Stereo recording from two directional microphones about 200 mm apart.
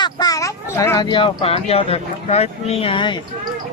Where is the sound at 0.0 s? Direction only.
20° left (ahead or behind).